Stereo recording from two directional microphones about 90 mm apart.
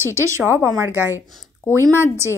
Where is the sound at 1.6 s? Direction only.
30° left (ahead or behind).